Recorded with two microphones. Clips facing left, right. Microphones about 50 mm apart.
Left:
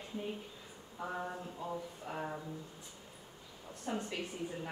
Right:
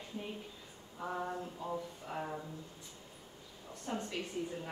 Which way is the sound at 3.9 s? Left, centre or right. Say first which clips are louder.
Left 1 dB; centre.